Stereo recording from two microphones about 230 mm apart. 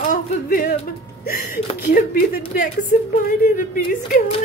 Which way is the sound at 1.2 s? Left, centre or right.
Left.